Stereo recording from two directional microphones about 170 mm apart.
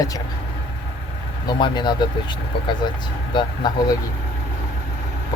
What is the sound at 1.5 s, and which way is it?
Speech, 25° left (ahead or behind).